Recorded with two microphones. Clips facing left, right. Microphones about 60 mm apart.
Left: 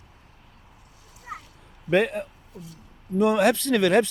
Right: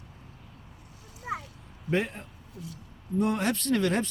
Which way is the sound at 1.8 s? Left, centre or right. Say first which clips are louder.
Left 7 dB; left.